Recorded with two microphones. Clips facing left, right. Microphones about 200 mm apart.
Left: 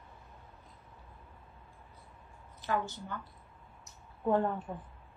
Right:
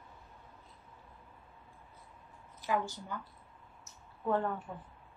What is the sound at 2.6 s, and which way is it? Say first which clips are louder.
Speech: even; 10° right (ahead or behind).